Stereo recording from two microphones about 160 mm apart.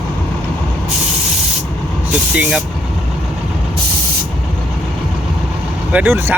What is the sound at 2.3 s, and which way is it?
Speech, 10° right (ahead or behind).